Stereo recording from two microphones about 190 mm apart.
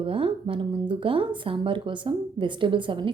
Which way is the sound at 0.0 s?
30° right (ahead or behind).